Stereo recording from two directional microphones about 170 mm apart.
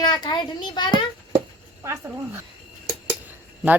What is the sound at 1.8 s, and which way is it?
Speech, 15° right (ahead or behind).